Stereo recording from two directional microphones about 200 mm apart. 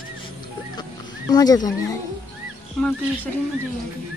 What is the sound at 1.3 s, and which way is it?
Speech, 20° left (ahead or behind).